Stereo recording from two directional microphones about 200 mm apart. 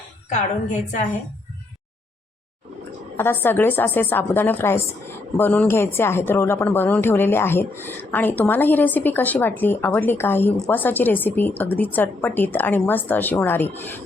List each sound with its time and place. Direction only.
0.3 s a woman's voice: 40° left (ahead or behind)
3.2 s a woman's voice: 10° left (ahead or behind)